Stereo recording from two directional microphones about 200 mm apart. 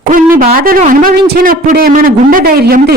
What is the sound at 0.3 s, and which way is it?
Speech, 45° right (ahead or behind).